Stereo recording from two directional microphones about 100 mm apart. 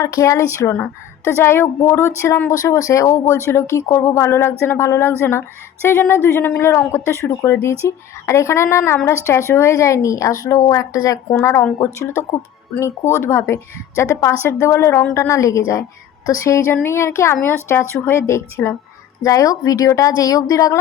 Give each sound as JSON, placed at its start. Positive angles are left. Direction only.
{"t": 0.0, "sound": "a woman's voice", "side_deg": 30}
{"t": 11.3, "sound": "a woman's voice", "side_deg": 25}